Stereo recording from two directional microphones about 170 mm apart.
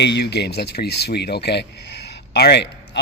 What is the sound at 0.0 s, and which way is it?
Speech, 80° left.